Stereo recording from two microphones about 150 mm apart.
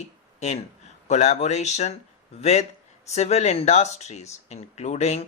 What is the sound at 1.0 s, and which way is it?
Speech, 50° left (ahead or behind).